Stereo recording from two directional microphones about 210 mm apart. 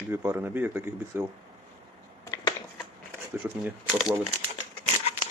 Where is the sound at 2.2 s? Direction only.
15° left (ahead or behind).